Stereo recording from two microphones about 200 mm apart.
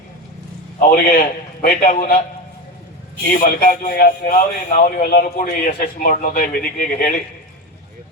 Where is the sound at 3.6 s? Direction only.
45° left (ahead or behind).